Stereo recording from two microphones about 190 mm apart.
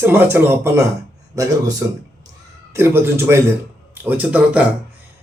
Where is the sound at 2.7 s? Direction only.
15° right (ahead or behind).